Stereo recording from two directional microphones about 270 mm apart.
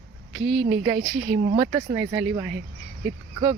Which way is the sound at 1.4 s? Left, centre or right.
Right.